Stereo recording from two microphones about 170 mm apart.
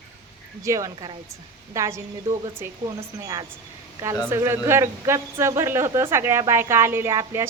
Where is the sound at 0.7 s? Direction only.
20° right (ahead or behind).